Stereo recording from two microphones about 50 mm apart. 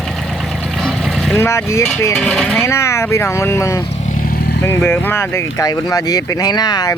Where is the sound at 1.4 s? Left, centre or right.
Left.